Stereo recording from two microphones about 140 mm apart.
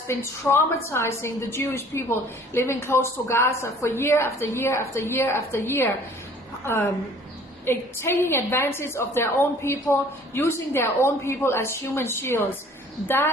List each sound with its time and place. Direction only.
0.1 s a woman's voice: 15° left (ahead or behind)